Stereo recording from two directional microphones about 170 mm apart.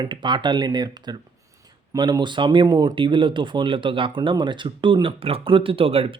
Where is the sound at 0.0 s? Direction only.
25° right (ahead or behind).